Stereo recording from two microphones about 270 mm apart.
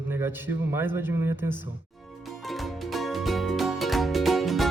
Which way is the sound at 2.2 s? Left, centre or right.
Centre.